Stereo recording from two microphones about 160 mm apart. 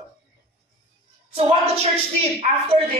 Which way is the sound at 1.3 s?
35° right (ahead or behind).